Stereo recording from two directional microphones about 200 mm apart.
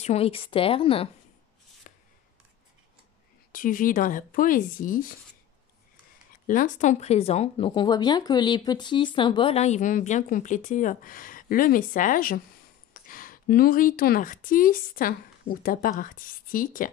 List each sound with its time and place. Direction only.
0.0 s a woman's voice: 30° left (ahead or behind)
3.5 s speech: 45° left (ahead or behind)
6.4 s speech: 40° left (ahead or behind)